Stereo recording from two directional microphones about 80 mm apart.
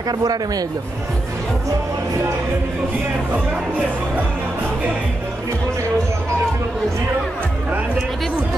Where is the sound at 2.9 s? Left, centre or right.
Right.